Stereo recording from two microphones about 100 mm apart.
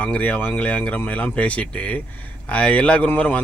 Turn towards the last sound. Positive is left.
turn(degrees=15)  # may be behind; listen again after turning